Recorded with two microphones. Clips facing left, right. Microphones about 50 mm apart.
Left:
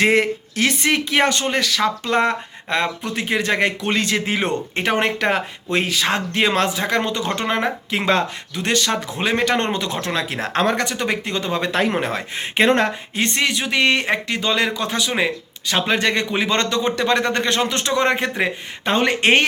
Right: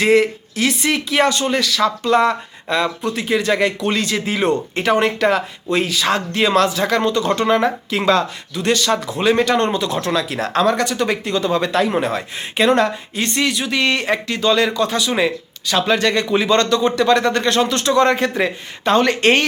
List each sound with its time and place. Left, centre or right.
0.0 s speech: left